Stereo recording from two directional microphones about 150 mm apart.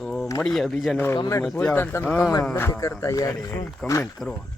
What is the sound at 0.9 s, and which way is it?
A man's voice, 15° left (ahead or behind).